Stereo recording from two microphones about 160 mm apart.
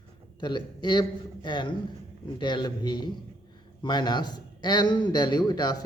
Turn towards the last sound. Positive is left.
turn(degrees=25)  # may be behind; listen again after turning